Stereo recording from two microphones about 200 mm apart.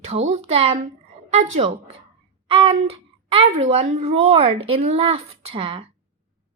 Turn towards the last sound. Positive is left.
turn(degrees=-25)  # may be behind; listen again after turning